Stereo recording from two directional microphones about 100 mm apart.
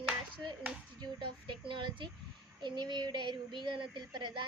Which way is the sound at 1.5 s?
55° right (ahead or behind).